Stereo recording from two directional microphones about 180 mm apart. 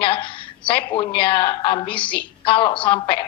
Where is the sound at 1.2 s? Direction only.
30° left (ahead or behind).